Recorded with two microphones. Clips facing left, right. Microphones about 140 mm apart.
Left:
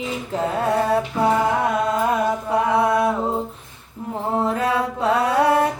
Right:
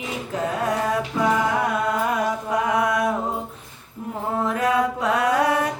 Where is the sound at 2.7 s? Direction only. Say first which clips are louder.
Left 3 dB; 30° left (ahead or behind).